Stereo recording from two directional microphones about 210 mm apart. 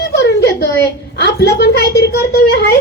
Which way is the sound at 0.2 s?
55° left (ahead or behind).